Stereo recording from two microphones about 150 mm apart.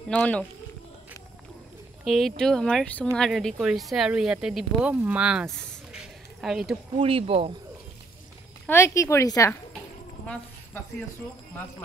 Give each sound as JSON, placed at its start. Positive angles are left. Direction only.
{"t": 0.1, "sound": "speech", "side_deg": 10}
{"t": 2.0, "sound": "speech", "side_deg": 0}
{"t": 5.9, "sound": "a sound", "side_deg": 0}
{"t": 7.0, "sound": "speech", "side_deg": -40}
{"t": 8.6, "sound": "speech", "side_deg": 20}
{"t": 10.2, "sound": "speech", "side_deg": 5}